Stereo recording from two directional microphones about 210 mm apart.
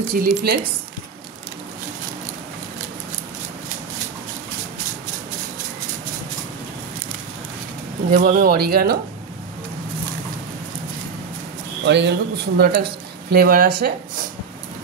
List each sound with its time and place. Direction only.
0.1 s speech: 45° right (ahead or behind)
8.1 s speech: 45° right (ahead or behind)
11.8 s speech: 55° right (ahead or behind)